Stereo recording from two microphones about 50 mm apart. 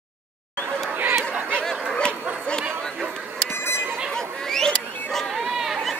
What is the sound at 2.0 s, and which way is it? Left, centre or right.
Honk, centre.